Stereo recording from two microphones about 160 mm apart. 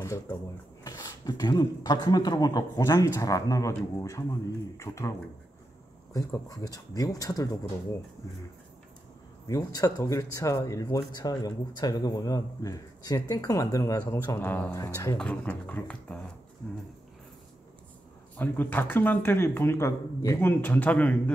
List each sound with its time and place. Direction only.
0.0 s speech: 20° left (ahead or behind)
6.1 s speech: 20° left (ahead or behind)
9.5 s speech: 20° left (ahead or behind)
14.4 s speech: 10° left (ahead or behind)
14.7 s speech: 20° left (ahead or behind)
15.1 s speech: 5° left (ahead or behind)
18.4 s speech: 10° left (ahead or behind)